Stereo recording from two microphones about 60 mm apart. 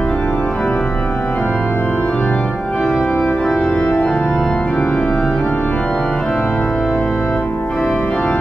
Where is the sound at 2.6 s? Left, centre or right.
Centre.